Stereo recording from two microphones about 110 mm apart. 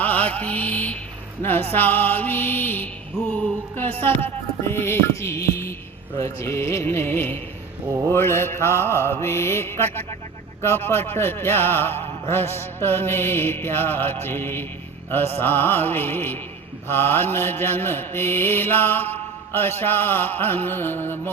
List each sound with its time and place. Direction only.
0.0 s mantra: 15° left (ahead or behind)
1.4 s music: 20° left (ahead or behind)
3.3 s mantra: 20° left (ahead or behind)
15.4 s music: 20° left (ahead or behind)
16.9 s mantra: 20° left (ahead or behind)